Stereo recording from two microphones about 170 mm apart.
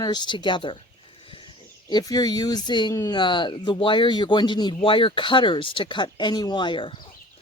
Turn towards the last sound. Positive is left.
turn(degrees=30)  # may be behind; listen again after turning